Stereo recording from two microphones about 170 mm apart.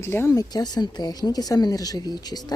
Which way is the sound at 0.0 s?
15° left (ahead or behind).